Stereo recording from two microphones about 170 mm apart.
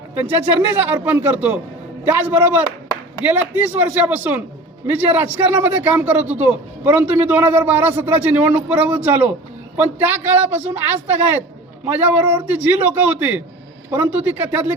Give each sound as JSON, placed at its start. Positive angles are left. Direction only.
{"t": 0.9, "sound": "a man's voice", "side_deg": -10}